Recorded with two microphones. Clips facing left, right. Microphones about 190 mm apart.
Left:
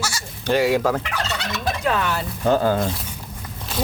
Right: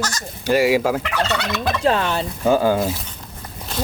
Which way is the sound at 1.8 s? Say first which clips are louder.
Right 4 dB; 30° right (ahead or behind).